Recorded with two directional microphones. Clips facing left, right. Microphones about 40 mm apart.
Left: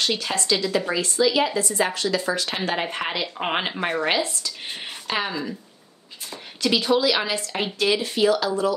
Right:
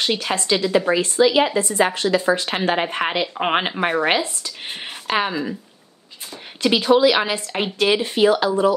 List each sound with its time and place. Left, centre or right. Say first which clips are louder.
0.0 s speech: right 3 dB; right
6.6 s speech: right 5 dB; right